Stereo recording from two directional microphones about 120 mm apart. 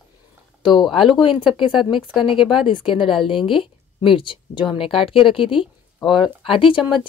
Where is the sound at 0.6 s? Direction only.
40° left (ahead or behind).